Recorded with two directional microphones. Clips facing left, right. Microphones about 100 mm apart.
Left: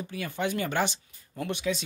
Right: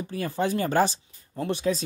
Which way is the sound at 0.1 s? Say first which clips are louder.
Right 5 dB; 35° right (ahead or behind).